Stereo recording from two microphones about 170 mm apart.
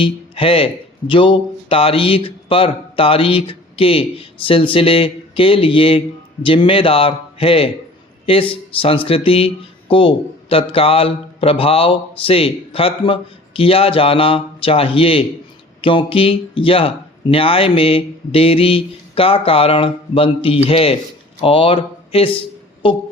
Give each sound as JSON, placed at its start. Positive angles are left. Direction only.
{"t": 0.0, "sound": "speech", "side_deg": 30}